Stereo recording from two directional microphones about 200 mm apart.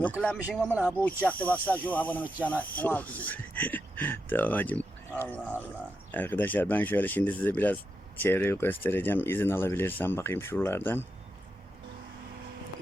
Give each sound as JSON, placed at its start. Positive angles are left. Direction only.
{"t": 0.4, "sound": "speech", "side_deg": -5}
{"t": 1.0, "sound": "speech", "side_deg": 5}